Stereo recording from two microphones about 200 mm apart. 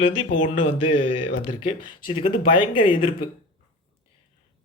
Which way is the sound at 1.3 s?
40° left (ahead or behind).